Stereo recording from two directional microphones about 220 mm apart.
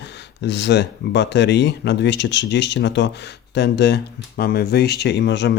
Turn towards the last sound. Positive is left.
turn(degrees=50)  # may be behind; listen again after turning